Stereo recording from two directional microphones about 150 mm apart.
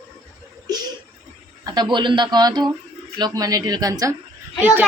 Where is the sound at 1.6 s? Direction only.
30° right (ahead or behind).